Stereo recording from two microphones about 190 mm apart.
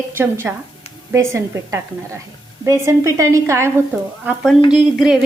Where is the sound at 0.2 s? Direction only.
10° right (ahead or behind).